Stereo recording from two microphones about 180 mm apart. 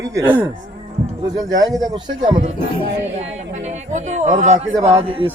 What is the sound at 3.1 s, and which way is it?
A man's voice, 40° right (ahead or behind).